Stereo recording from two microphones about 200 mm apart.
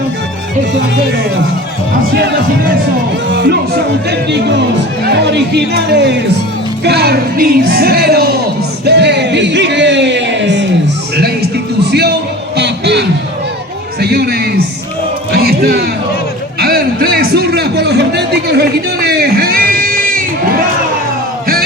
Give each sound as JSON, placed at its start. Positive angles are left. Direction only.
{"t": 2.1, "sound": "speech", "side_deg": -50}
{"t": 8.8, "sound": "music", "side_deg": -55}
{"t": 14.0, "sound": "a sound", "side_deg": -50}
{"t": 15.3, "sound": "music", "side_deg": -50}
{"t": 16.6, "sound": "a sound", "side_deg": -50}
{"t": 19.0, "sound": "crowd", "side_deg": -50}